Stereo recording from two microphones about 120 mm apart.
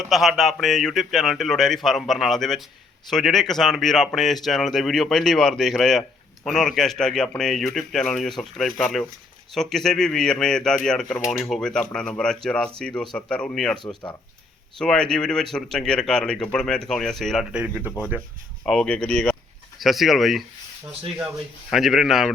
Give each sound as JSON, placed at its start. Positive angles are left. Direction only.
{"t": 0.0, "sound": "speech", "side_deg": 0}
{"t": 13.7, "sound": "speech", "side_deg": 40}
{"t": 14.8, "sound": "speech", "side_deg": 5}
{"t": 17.5, "sound": "speech", "side_deg": -10}
{"t": 18.6, "sound": "speech", "side_deg": 5}
{"t": 21.7, "sound": "speech", "side_deg": 0}